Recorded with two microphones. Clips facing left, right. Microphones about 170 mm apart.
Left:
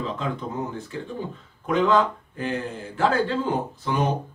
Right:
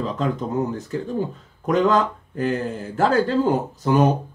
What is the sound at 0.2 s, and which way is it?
Speech, 40° right (ahead or behind).